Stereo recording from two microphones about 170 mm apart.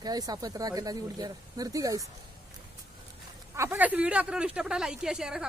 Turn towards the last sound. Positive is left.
turn(degrees=-5)  # may be behind; listen again after turning